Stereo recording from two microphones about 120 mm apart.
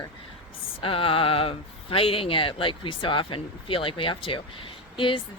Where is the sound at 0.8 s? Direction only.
50° left (ahead or behind).